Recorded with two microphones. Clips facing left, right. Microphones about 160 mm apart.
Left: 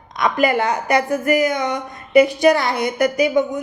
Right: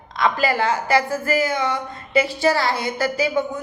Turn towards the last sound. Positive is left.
turn(degrees=20)  # may be behind; listen again after turning